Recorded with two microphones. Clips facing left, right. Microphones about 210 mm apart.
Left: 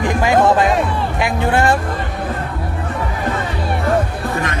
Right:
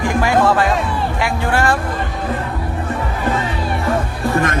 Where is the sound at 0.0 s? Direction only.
20° left (ahead or behind).